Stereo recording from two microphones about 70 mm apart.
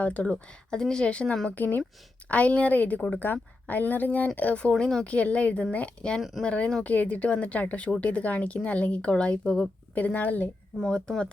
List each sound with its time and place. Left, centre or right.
0.0 s speech: left
0.7 s speech: centre